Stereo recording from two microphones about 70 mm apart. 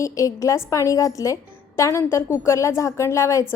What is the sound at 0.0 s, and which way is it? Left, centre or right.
A woman's voice, left.